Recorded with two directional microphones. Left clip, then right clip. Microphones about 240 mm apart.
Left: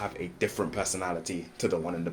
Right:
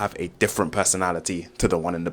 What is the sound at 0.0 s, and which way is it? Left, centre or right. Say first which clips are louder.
Speech: right 7 dB; right.